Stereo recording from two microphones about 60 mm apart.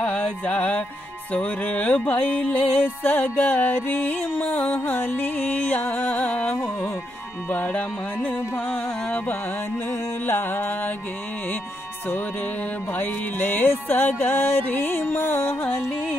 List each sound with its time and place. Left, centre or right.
0.0 s music: centre
10.2 s music: left
12.9 s music: left